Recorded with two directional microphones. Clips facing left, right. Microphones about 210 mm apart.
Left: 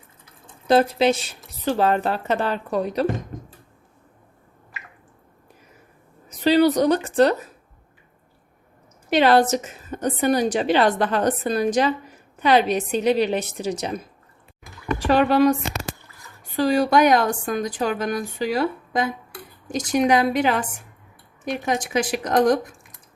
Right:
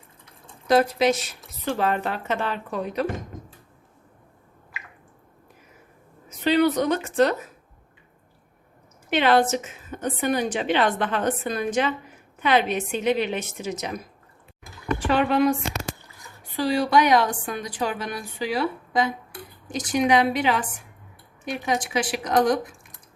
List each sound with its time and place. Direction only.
0.7 s a woman's voice: 30° left (ahead or behind)
6.2 s a woman's voice: 35° left (ahead or behind)
9.0 s a woman's voice: 35° left (ahead or behind)
15.0 s a woman's voice: 35° left (ahead or behind)
16.6 s a woman's voice: 45° left (ahead or behind)